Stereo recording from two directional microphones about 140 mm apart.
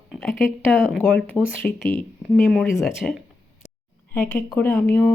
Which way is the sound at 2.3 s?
Centre (ahead or behind).